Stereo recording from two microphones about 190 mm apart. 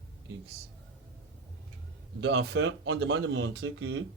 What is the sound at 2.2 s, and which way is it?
Speech, 65° right (ahead or behind).